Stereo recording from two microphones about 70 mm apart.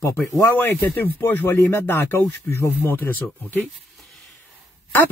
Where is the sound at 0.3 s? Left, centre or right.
Left.